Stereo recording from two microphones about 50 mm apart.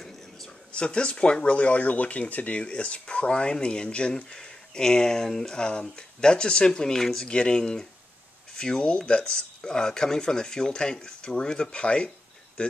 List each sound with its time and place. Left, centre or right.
0.7 s speech: left